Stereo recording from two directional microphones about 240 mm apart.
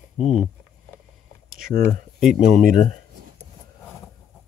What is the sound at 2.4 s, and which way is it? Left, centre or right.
Speech, left.